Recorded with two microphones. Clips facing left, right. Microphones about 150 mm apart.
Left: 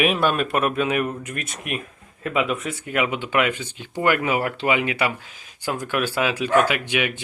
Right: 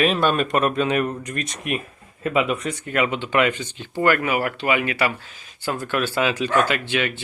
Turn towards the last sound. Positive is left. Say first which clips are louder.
# even
turn(degrees=15)  # may be behind; listen again after turning